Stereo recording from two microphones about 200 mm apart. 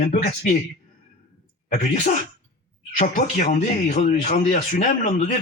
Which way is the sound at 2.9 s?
40° left (ahead or behind).